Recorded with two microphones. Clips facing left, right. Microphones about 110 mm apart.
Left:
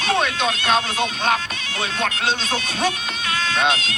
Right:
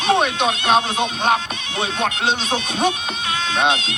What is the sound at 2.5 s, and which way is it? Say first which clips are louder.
Speech: right 3 dB; 20° right (ahead or behind).